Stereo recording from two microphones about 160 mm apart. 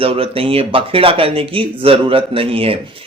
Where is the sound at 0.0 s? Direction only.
35° right (ahead or behind).